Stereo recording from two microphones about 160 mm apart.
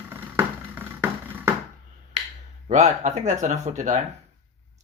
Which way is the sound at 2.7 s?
45° right (ahead or behind).